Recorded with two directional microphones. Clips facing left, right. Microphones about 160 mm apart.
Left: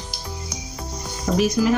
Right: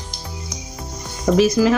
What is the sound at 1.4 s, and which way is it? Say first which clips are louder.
Speech: right 4 dB; 90° right.